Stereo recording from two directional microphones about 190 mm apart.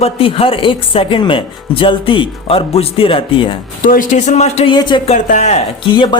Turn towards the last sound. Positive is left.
turn(degrees=25)  # may be behind; listen again after turning